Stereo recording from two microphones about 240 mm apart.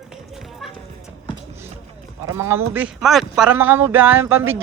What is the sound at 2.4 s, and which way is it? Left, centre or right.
Speech, centre.